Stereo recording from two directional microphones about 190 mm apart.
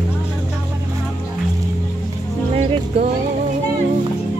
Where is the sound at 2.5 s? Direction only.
35° right (ahead or behind).